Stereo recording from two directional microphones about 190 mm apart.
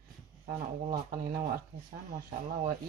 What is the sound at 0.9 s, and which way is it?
Speech, 50° right (ahead or behind).